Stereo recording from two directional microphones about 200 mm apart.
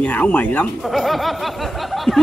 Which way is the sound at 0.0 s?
10° left (ahead or behind).